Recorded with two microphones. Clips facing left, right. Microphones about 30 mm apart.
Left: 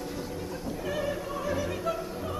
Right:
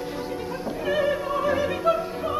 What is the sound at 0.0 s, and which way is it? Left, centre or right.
Opera, right.